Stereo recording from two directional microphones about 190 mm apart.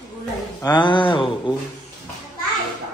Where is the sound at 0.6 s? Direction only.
25° left (ahead or behind).